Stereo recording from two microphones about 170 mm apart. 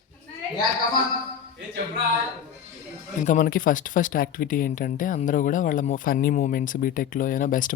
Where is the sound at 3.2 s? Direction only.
50° left (ahead or behind).